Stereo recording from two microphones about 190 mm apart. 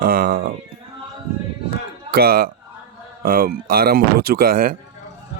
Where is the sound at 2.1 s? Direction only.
55° right (ahead or behind).